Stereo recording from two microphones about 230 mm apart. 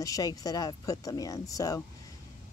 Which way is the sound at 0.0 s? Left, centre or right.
Centre.